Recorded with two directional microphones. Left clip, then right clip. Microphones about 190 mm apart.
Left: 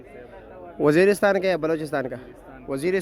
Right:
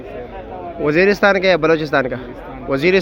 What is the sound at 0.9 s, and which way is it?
A man's voice, 35° left (ahead or behind).